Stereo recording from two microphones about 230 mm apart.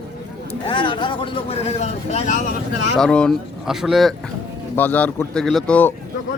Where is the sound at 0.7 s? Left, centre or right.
Left.